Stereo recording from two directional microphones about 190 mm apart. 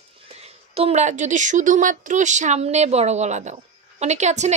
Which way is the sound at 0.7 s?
35° right (ahead or behind).